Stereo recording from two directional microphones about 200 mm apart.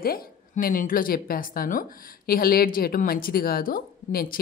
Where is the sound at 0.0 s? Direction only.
45° left (ahead or behind).